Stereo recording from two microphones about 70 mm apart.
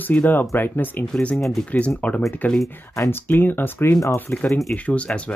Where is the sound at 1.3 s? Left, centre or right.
Centre.